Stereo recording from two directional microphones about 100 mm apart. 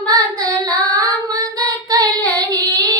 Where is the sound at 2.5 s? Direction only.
40° right (ahead or behind).